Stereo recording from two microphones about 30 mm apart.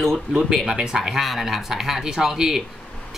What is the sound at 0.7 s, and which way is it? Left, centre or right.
Speech, centre.